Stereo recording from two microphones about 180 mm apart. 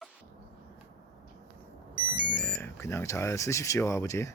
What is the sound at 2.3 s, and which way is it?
Speech, 5° left (ahead or behind).